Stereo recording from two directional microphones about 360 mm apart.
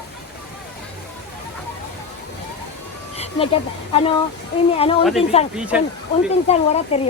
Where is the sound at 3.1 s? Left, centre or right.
Centre.